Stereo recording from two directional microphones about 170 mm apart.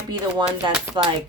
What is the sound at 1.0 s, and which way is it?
Speech, 25° right (ahead or behind).